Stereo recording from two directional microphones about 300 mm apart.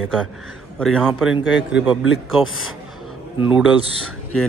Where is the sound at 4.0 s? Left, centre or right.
Left.